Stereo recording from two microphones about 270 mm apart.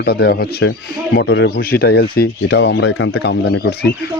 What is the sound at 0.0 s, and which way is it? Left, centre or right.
Speech, left.